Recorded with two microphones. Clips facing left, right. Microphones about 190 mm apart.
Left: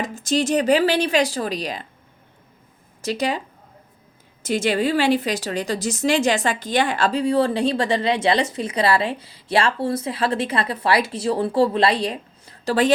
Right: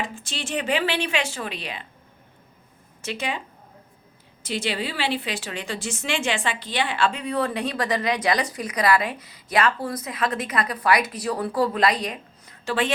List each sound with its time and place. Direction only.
0.0 s speech: 40° left (ahead or behind)
3.0 s speech: 40° left (ahead or behind)
4.4 s a woman's voice: 45° left (ahead or behind)